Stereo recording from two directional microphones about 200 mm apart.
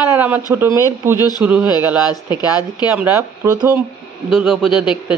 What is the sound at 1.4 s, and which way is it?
Speech, 5° right (ahead or behind).